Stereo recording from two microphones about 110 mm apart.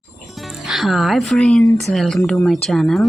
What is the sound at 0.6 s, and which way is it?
A woman's voice, centre (ahead or behind).